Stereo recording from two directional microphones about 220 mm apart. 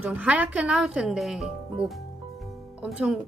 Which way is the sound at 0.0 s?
5° right (ahead or behind).